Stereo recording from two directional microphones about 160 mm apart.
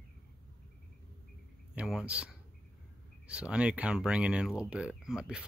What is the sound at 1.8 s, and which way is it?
Speech, 5° right (ahead or behind).